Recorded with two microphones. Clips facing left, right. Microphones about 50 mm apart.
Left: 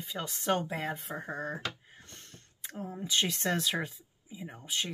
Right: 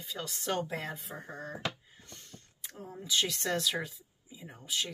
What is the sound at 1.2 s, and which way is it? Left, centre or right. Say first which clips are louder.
Speech: left 2 dB; left.